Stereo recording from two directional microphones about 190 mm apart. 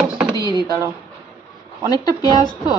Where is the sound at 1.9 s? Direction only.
20° left (ahead or behind).